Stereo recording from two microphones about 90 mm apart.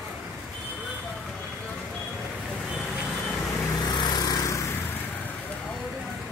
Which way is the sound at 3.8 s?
50° left (ahead or behind).